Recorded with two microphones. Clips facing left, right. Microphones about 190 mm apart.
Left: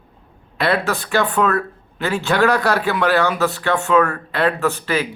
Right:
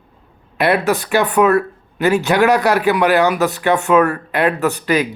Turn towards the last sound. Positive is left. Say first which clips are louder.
# right 3 dB
turn(degrees=-15)  # may be behind; listen again after turning